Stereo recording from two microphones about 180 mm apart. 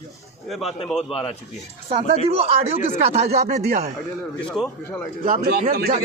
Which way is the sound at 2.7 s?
40° left (ahead or behind).